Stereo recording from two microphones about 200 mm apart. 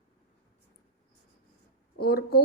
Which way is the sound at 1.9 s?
50° left (ahead or behind).